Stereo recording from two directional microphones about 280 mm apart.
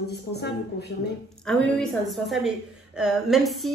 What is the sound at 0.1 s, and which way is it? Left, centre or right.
Speech, left.